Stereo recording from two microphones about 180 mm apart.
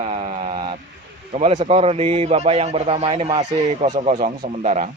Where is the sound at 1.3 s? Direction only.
35° right (ahead or behind).